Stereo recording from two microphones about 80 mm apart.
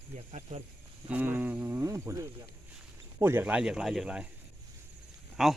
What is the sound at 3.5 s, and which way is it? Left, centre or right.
Speech, centre.